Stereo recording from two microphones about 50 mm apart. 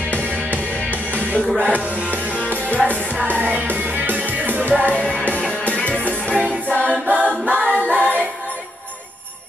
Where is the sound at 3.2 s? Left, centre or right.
Right.